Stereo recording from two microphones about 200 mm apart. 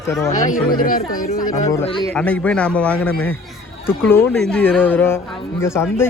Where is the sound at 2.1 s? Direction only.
5° left (ahead or behind).